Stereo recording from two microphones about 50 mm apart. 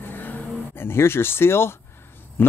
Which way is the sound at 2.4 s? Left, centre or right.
Left.